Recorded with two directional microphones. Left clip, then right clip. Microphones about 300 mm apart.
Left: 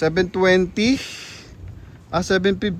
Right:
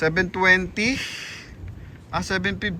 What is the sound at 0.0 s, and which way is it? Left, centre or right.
Speech, centre.